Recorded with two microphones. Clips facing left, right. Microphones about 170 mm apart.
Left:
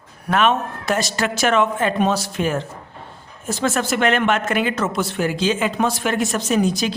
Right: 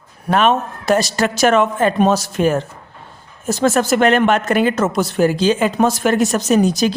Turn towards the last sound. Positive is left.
turn(degrees=-40)  # may be behind; listen again after turning